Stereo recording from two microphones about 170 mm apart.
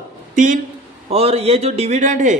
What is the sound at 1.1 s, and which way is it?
A man's voice, 35° right (ahead or behind).